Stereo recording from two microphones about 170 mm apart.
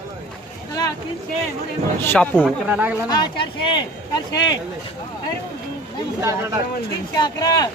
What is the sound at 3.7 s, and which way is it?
Speech, 25° left (ahead or behind).